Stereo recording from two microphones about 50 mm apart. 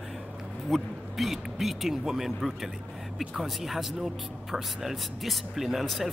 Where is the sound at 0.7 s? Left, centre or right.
Centre.